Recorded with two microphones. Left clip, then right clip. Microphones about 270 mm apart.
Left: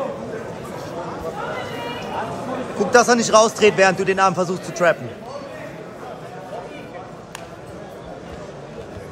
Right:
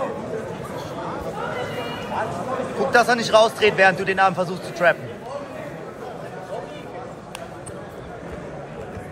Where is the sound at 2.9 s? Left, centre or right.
Left.